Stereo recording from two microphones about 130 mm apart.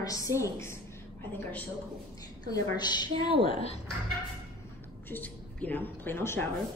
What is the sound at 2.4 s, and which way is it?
Speech, 30° left (ahead or behind).